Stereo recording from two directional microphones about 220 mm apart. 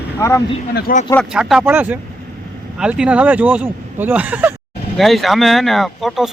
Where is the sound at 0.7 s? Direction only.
40° left (ahead or behind).